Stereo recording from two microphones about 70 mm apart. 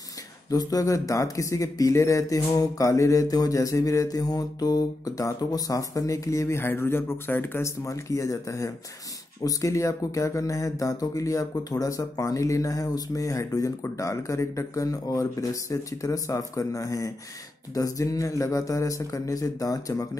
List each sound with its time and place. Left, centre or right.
0.5 s speech: left
6.6 s speech: left
7.6 s speech: left